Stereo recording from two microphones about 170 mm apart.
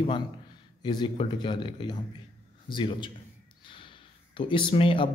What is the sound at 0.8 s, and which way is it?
Speech, 30° left (ahead or behind).